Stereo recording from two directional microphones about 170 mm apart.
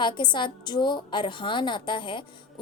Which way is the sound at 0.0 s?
25° left (ahead or behind).